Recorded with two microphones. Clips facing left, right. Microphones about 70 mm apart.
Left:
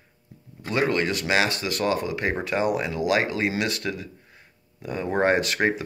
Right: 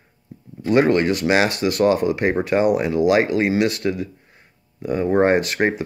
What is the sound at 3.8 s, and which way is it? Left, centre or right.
Speech, centre.